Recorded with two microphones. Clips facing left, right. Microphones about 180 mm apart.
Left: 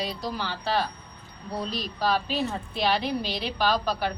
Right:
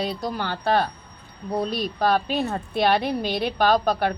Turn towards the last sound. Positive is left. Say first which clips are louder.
# right 5 dB
turn(degrees=-55)  # may be behind; listen again after turning